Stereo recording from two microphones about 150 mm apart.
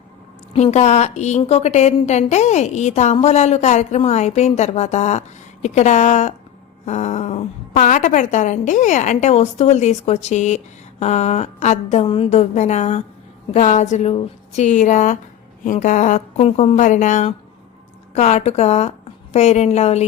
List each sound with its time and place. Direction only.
0.5 s a woman's voice: 50° left (ahead or behind)
12.0 s a woman's voice: 40° left (ahead or behind)